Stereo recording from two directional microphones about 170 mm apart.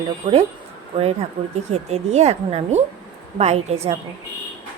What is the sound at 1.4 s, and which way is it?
Speech, 30° right (ahead or behind).